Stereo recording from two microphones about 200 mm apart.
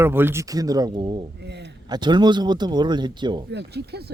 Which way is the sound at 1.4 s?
60° right (ahead or behind).